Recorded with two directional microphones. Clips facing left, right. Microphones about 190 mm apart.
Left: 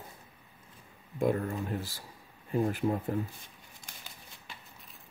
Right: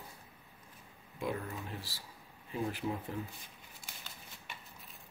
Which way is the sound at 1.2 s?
50° left (ahead or behind).